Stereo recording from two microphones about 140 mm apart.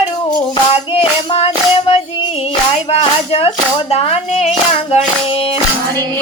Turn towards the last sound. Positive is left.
turn(degrees=50)  # may be behind; listen again after turning